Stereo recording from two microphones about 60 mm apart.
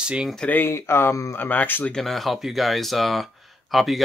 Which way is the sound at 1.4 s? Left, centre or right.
Left.